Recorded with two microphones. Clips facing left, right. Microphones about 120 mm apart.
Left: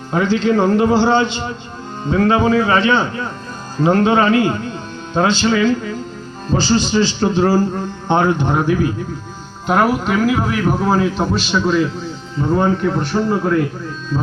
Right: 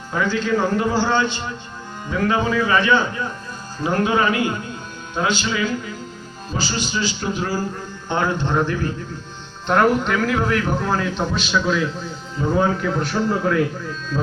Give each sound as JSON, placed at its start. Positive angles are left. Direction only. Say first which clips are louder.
{"t": 0.1, "sound": "a man's voice", "louder": "left 5 dB", "side_deg": 25}
{"t": 8.1, "sound": "a man's voice", "louder": "left 5 dB", "side_deg": 20}